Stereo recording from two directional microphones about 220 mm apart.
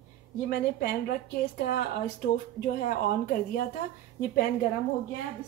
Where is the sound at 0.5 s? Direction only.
45° left (ahead or behind).